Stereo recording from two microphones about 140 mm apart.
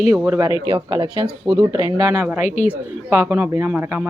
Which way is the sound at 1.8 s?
20° right (ahead or behind).